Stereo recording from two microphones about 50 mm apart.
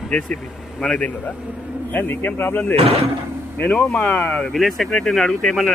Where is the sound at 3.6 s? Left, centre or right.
Left.